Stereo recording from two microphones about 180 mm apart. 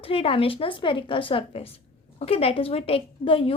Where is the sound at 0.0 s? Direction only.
30° left (ahead or behind).